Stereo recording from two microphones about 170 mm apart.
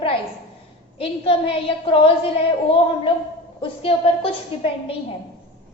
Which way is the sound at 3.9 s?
35° left (ahead or behind).